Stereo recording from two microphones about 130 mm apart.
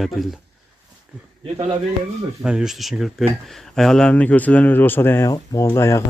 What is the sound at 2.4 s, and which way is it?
Speech, 5° right (ahead or behind).